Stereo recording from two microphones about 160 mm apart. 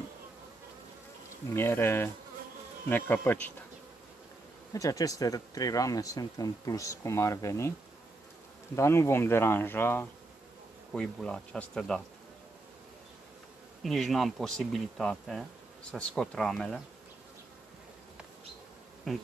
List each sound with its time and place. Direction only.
1.5 s speech: 15° left (ahead or behind)
4.7 s speech: 20° left (ahead or behind)
8.7 s speech: 15° left (ahead or behind)
13.8 s speech: centre (ahead or behind)